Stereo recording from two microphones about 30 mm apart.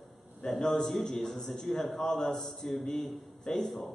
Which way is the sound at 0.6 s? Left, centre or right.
Centre.